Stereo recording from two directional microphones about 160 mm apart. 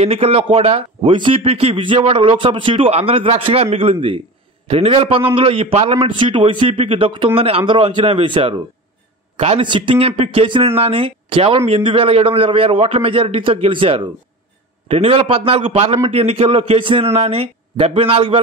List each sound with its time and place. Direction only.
0.0 s a man's voice: 35° right (ahead or behind)